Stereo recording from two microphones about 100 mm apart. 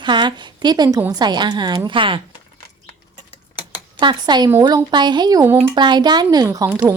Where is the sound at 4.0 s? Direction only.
50° right (ahead or behind).